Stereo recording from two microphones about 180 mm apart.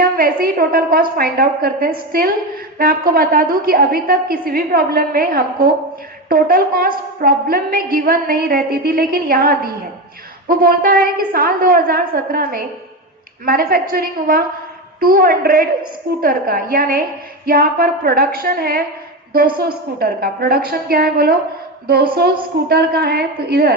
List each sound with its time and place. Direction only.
0.0 s a woman's voice: 55° right (ahead or behind)
22.7 s a woman's voice: 60° right (ahead or behind)